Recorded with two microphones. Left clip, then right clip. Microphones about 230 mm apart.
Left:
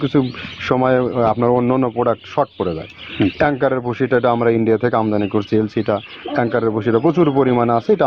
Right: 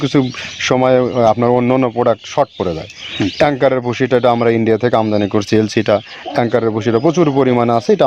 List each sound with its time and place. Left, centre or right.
0.0 s speech: right